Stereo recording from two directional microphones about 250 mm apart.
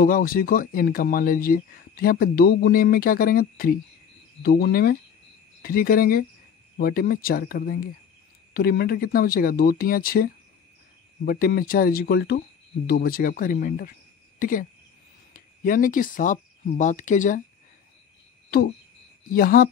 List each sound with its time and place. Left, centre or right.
0.0 s speech: left
15.3 s cricket: left
19.3 s speech: left